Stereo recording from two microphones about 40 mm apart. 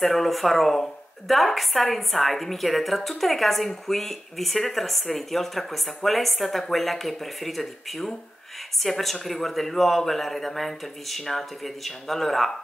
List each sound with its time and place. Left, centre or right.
0.0 s speech: centre